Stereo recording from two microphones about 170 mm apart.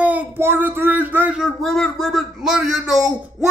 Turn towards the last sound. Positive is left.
turn(degrees=-5)  # may be behind; listen again after turning